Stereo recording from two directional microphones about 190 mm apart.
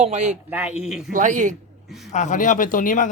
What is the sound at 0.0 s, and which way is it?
Speech, 40° right (ahead or behind).